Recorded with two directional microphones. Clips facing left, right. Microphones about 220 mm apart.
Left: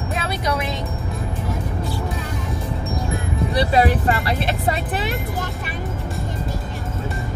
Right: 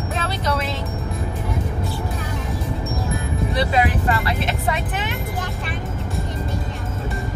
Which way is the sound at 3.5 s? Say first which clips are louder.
Left 3 dB; 35° left (ahead or behind).